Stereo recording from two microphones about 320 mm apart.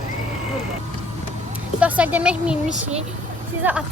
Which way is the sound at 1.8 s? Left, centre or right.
Centre.